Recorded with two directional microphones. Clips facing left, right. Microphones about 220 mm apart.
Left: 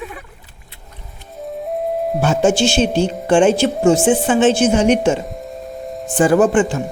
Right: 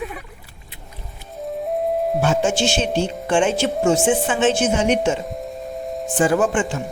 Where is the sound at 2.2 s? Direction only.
35° left (ahead or behind).